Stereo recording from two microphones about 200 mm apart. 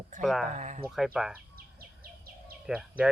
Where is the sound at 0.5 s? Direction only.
35° right (ahead or behind).